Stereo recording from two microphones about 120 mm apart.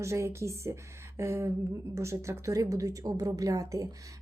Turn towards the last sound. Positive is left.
turn(degrees=-30)  # may be behind; listen again after turning